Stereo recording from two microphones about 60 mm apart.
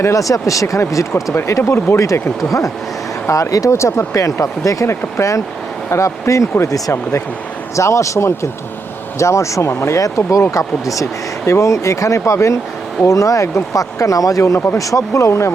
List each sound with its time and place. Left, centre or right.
0.0 s speech: left
3.2 s speech: left
4.9 s speech: left
7.8 s speech: left
10.0 s speech: left